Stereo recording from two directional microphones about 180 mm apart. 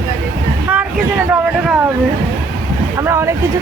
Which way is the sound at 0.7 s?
5° right (ahead or behind).